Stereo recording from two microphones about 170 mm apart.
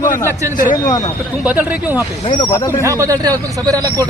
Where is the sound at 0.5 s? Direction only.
50° left (ahead or behind).